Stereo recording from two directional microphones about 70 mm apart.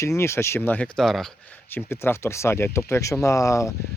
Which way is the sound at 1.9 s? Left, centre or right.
Left.